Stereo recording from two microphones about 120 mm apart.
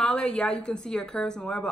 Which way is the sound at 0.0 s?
10° left (ahead or behind).